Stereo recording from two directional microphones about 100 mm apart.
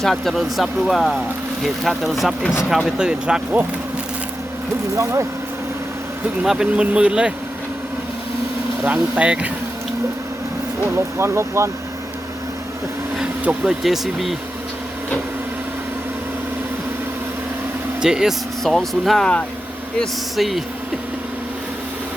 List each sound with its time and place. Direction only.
0.0 s speech: centre (ahead or behind)
6.4 s speech: 5° right (ahead or behind)
8.8 s speech: 15° right (ahead or behind)
10.9 s speech: 25° right (ahead or behind)
13.4 s speech: 10° right (ahead or behind)
18.0 s speech: 5° right (ahead or behind)